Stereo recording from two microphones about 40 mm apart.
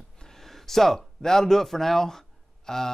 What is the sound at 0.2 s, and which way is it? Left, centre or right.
Speech, centre.